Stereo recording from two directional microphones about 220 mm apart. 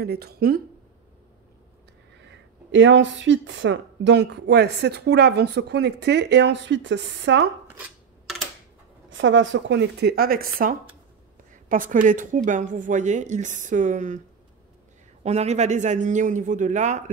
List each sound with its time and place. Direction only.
0.0 s speech: 45° right (ahead or behind)
2.1 s speech: 55° right (ahead or behind)
9.1 s speech: 60° right (ahead or behind); by 14.2 s 35° right (ahead or behind)
15.2 s speech: 30° right (ahead or behind)